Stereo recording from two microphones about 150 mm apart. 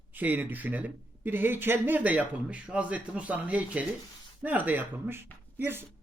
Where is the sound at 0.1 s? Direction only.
10° right (ahead or behind).